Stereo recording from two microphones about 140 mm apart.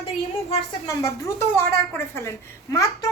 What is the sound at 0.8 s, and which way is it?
Speech, 20° left (ahead or behind).